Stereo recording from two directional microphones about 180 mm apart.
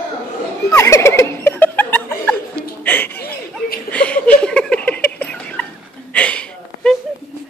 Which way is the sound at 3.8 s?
5° left (ahead or behind).